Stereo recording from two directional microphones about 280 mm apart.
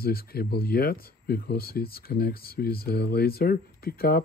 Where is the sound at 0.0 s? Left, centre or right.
Left.